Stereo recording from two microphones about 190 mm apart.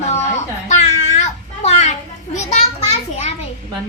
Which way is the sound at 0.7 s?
35° left (ahead or behind).